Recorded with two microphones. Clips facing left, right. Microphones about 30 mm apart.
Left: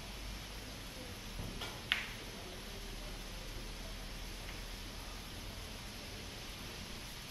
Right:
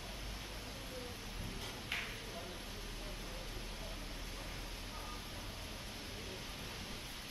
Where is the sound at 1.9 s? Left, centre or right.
Left.